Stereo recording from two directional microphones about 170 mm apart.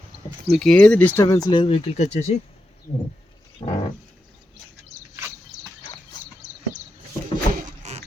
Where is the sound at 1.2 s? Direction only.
20° left (ahead or behind); by 2.2 s 40° left (ahead or behind).